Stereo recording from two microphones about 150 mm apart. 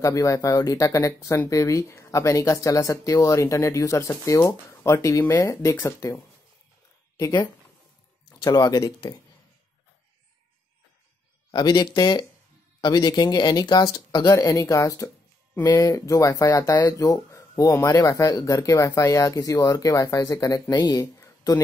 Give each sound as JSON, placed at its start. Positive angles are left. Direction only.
{"t": 0.0, "sound": "speech", "side_deg": 20}
{"t": 11.5, "sound": "speech", "side_deg": 30}